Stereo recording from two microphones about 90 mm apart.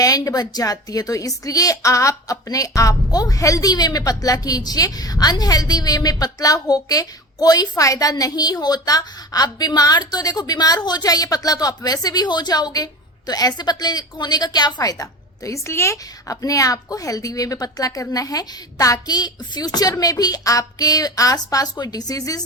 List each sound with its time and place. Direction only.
0.0 s a woman's voice: 45° left (ahead or behind)